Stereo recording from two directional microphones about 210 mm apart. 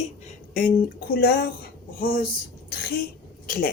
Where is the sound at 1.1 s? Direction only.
45° left (ahead or behind).